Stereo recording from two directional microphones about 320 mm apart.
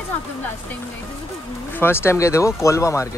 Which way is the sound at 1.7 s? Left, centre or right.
Centre.